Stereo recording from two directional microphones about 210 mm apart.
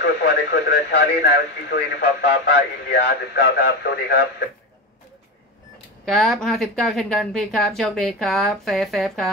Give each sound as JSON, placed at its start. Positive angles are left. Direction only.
{"t": 0.0, "sound": "speech", "side_deg": 50}
{"t": 6.0, "sound": "speech", "side_deg": 0}